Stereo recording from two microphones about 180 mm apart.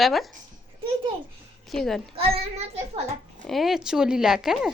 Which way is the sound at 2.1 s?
35° right (ahead or behind).